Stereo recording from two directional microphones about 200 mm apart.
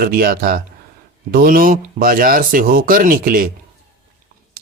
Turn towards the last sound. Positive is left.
turn(degrees=-45)  # may be behind; listen again after turning